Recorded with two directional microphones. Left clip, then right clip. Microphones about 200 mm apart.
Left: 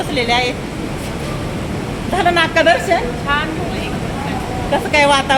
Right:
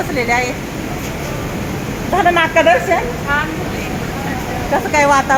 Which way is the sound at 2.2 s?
20° right (ahead or behind).